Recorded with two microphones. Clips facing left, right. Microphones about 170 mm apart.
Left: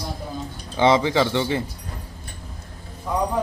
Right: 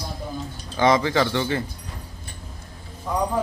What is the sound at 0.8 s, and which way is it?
Speech, 20° left (ahead or behind).